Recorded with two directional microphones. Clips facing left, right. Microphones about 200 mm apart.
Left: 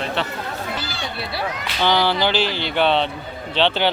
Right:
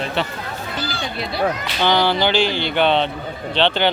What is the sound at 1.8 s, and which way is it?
Speech, 5° left (ahead or behind).